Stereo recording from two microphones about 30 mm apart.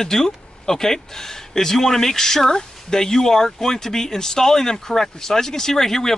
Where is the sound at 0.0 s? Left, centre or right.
Centre.